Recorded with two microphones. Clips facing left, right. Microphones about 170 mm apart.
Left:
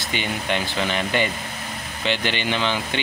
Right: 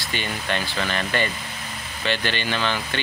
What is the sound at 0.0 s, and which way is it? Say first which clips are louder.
Speech: left 2 dB; 15° left (ahead or behind).